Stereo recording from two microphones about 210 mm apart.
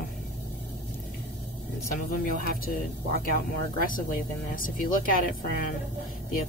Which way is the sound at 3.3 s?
40° left (ahead or behind).